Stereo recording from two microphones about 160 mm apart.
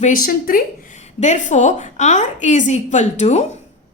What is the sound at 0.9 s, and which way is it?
A woman's voice, 45° left (ahead or behind).